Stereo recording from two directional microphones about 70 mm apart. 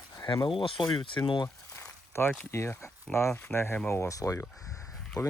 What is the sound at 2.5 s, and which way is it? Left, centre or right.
Speech, left.